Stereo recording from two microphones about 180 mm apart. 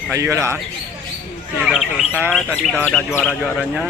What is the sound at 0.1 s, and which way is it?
Speech, 15° right (ahead or behind).